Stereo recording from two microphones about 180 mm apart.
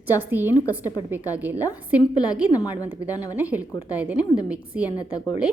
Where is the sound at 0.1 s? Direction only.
10° right (ahead or behind).